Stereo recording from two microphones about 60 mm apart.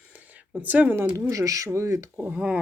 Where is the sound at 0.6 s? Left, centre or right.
Right.